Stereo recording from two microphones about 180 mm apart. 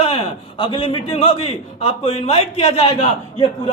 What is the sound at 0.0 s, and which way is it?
A man's voice, 30° left (ahead or behind).